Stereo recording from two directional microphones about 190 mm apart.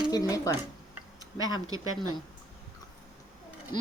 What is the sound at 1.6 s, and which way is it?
Speech, 20° right (ahead or behind).